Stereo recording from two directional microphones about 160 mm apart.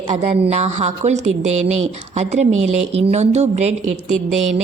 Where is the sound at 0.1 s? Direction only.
45° right (ahead or behind).